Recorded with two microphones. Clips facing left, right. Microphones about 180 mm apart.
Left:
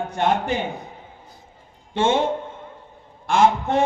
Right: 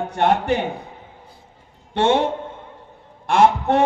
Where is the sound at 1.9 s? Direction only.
70° right (ahead or behind).